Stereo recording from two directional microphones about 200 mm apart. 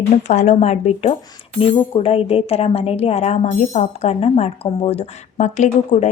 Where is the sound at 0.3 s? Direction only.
35° left (ahead or behind).